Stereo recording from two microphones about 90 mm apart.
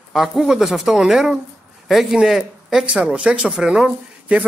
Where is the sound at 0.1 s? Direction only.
5° right (ahead or behind).